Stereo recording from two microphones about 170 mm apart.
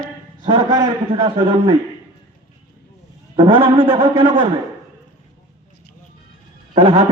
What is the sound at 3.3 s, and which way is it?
Speech, 25° right (ahead or behind).